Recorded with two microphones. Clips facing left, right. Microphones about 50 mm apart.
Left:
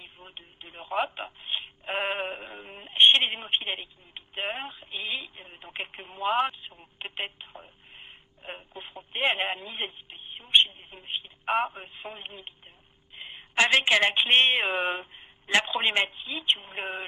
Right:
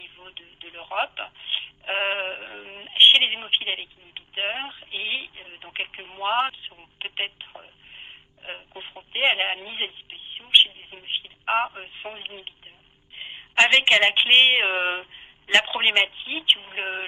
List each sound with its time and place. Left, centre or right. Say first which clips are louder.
0.0 s speech: right 3 dB; right
6.3 s telephone: right 3 dB; right
11.7 s a woman's voice: right 4 dB; right